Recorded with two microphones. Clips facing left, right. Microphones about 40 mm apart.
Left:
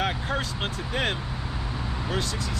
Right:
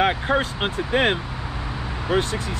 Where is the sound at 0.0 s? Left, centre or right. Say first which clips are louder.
Right 7 dB; right.